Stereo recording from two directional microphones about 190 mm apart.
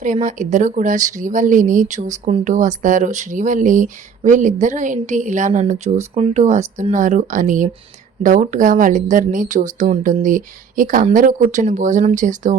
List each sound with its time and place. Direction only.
0.0 s speech: 40° right (ahead or behind)